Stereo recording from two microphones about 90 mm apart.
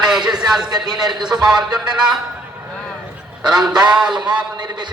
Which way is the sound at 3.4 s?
5° right (ahead or behind).